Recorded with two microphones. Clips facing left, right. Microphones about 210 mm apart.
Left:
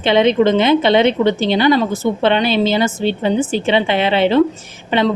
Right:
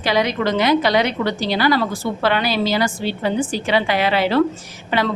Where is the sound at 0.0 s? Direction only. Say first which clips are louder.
Left 7 dB; 25° left (ahead or behind).